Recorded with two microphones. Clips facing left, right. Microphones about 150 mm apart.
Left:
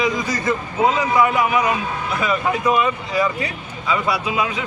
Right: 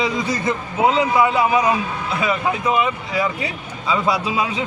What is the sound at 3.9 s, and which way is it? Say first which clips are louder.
Speech: right 1 dB; 25° right (ahead or behind).